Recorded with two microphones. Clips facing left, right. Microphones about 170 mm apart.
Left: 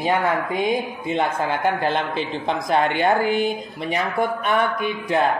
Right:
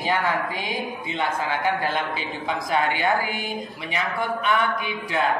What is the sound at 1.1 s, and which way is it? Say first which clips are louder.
Speech: left 5 dB; 50° left (ahead or behind).